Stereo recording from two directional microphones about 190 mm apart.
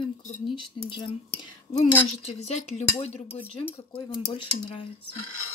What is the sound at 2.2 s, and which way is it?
Dishes, 35° left (ahead or behind).